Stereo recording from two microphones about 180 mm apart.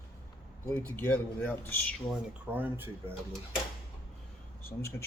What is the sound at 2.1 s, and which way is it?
Speech, 10° right (ahead or behind).